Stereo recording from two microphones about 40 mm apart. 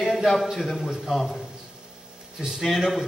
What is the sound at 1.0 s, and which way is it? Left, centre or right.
Speech, centre.